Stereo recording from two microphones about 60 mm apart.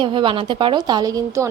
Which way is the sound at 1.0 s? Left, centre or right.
Right.